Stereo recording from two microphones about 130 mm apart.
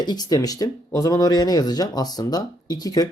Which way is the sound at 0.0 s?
30° left (ahead or behind).